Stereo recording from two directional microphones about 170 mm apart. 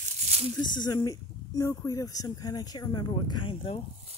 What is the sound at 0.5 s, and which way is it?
Speech, 25° left (ahead or behind).